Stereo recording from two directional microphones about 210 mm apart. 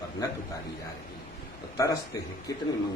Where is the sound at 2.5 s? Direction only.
15° left (ahead or behind).